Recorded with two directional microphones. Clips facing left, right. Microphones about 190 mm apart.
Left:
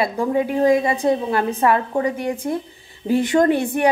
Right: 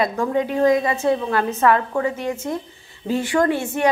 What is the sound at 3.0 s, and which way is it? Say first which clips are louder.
Speech: left 3 dB; 20° left (ahead or behind).